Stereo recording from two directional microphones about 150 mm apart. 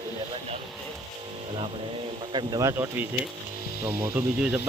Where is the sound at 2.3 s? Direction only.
25° right (ahead or behind).